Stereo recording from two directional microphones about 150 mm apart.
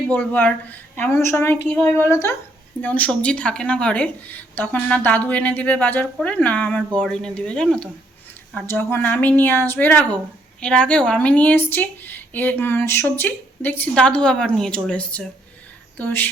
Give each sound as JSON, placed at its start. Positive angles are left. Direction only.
{"t": 0.1, "sound": "a woman's voice", "side_deg": 10}